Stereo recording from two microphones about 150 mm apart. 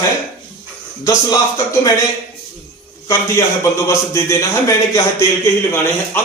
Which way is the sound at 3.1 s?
20° left (ahead or behind).